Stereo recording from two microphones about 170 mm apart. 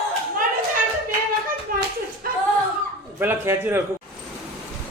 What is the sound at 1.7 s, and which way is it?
Hands, 55° right (ahead or behind).